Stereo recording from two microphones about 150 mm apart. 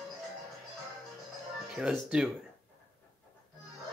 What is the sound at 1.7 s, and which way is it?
Speech, 5° right (ahead or behind).